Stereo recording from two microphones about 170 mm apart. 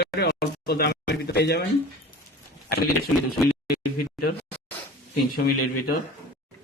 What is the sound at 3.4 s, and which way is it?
Speech, centre (ahead or behind).